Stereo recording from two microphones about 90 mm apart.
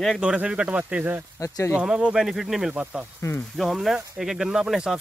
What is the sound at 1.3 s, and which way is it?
Speech, 35° left (ahead or behind).